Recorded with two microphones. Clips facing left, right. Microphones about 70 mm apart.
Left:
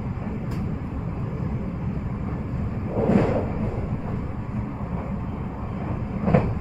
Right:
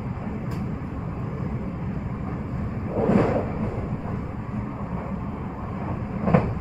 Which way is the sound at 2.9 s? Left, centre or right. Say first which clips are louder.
Even; centre.